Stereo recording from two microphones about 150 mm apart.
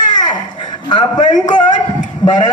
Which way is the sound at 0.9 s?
30° left (ahead or behind).